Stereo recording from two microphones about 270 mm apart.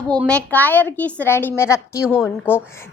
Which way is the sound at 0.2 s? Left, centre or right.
Centre.